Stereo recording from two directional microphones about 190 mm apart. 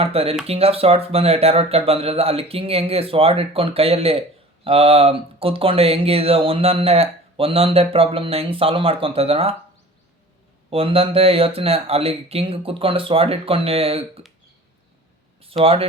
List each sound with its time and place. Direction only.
0.0 s speech: 30° right (ahead or behind)
10.7 s speech: 30° right (ahead or behind)
15.4 s speech: 30° right (ahead or behind)